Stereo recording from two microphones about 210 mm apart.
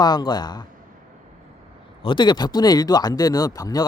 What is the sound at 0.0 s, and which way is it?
Speech, 20° left (ahead or behind).